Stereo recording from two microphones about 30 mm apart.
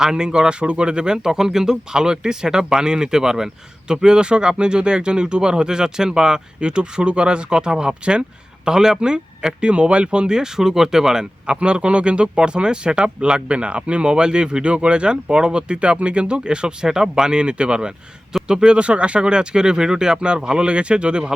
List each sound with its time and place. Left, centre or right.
0.0 s speech: right
0.6 s speech: right
8.6 s speech: right
10.3 s speech: centre
11.5 s speech: right
13.0 s speech: right
13.5 s speech: right; by 17.3 s centre
17.3 s speech: right
18.8 s speech: right